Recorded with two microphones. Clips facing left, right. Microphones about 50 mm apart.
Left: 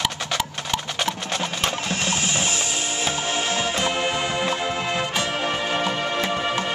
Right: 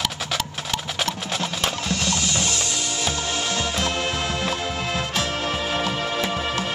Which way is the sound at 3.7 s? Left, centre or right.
Centre.